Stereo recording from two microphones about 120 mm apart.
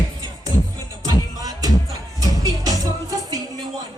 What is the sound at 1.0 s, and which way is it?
Music, 30° right (ahead or behind).